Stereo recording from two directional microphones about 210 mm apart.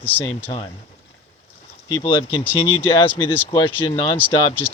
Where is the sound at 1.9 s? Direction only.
20° left (ahead or behind).